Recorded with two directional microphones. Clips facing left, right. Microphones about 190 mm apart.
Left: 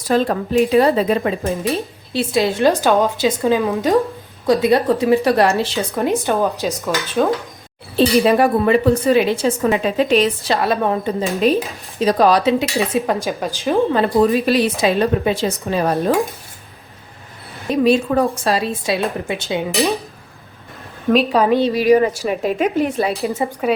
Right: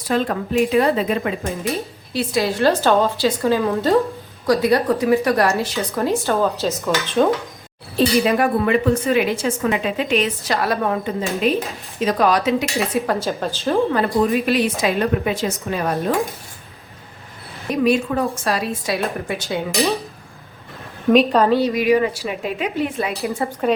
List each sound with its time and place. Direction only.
0.1 s a woman's voice: 35° left (ahead or behind)
5.9 s a woman's voice: 15° left (ahead or behind)
7.9 s speech: 30° left (ahead or behind)
12.9 s a woman's voice: 15° left (ahead or behind)
13.9 s speech: 35° left (ahead or behind)
17.7 s a woman's voice: 30° left (ahead or behind)
21.1 s a woman's voice: centre (ahead or behind)
21.6 s speech: 35° left (ahead or behind)
23.7 s a woman's voice: 10° left (ahead or behind)